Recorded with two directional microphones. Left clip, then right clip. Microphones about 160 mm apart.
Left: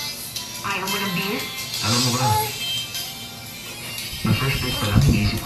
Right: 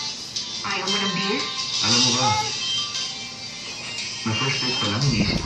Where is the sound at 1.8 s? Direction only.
30° left (ahead or behind).